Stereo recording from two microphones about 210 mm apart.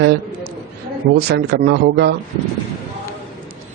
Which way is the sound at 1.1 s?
50° right (ahead or behind).